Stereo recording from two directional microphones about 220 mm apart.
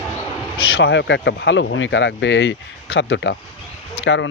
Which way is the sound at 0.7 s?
55° left (ahead or behind).